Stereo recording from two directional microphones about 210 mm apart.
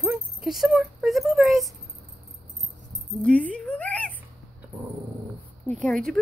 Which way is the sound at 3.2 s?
5° left (ahead or behind).